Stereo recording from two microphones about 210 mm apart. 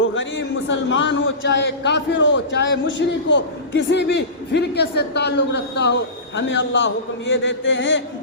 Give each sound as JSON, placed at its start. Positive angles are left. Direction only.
{"t": 0.0, "sound": "a man's voice", "side_deg": 65}
{"t": 6.3, "sound": "a man's voice", "side_deg": 60}